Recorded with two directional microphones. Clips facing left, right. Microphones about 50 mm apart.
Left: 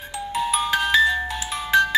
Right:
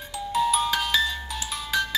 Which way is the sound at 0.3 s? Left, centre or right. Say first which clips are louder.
Even; left.